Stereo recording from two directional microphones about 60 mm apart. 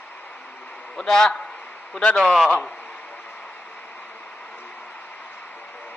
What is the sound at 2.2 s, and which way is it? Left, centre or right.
Speech, centre.